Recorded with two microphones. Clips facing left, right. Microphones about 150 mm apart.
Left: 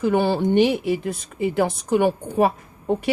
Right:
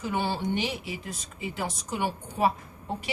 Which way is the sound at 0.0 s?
60° left (ahead or behind).